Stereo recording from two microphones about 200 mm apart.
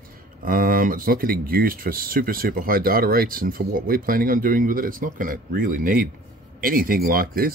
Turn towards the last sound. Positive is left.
turn(degrees=-45)  # may be behind; listen again after turning